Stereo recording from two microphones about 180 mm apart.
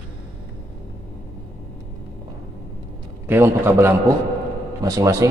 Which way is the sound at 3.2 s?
15° right (ahead or behind).